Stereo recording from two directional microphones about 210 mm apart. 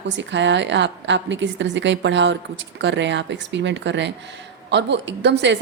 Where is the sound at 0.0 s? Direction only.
60° right (ahead or behind).